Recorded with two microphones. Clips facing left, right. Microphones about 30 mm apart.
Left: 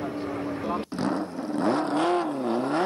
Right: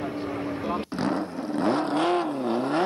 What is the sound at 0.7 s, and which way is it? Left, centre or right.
Vehicle, right.